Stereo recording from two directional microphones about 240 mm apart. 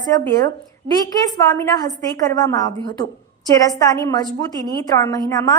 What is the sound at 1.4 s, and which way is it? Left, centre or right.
A woman's voice, centre.